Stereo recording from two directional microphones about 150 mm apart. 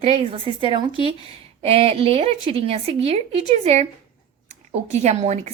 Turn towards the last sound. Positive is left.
turn(degrees=-50)  # may be behind; listen again after turning